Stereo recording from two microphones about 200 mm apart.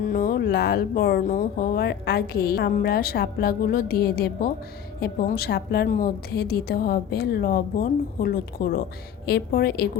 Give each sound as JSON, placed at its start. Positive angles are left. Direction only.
{"t": 0.1, "sound": "speech", "side_deg": 45}